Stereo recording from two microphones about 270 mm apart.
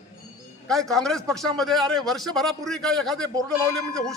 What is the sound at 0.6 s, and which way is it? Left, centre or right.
A man's voice, centre.